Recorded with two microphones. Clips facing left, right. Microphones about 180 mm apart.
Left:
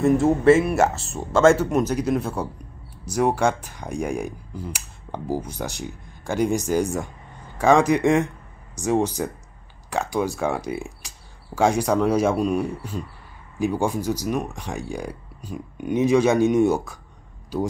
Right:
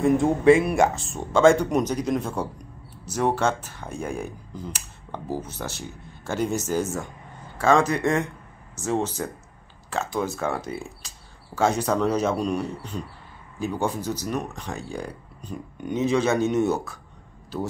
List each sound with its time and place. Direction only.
0.0 s speech: 5° left (ahead or behind)